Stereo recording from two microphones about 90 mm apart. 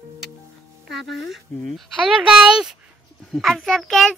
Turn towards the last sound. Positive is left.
turn(degrees=5)  # may be behind; listen again after turning